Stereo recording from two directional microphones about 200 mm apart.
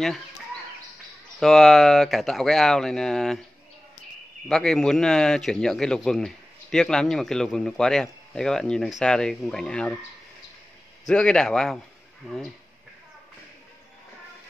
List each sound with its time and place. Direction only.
1.4 s speech: centre (ahead or behind)
4.5 s speech: 5° left (ahead or behind)
11.1 s speech: 5° left (ahead or behind)